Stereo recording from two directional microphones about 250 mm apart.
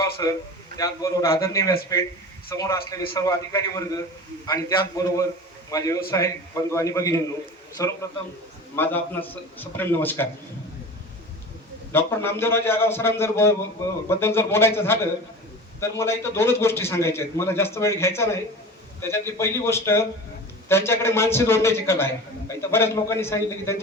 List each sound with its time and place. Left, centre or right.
0.2 s a man's voice: centre
11.9 s a man's voice: centre